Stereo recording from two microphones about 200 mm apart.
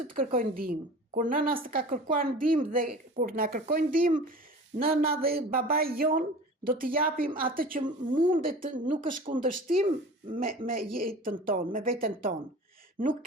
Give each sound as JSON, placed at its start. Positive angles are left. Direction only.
{"t": 0.1, "sound": "a woman's voice", "side_deg": -45}